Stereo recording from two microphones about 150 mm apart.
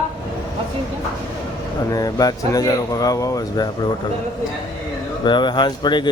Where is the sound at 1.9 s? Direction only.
25° left (ahead or behind).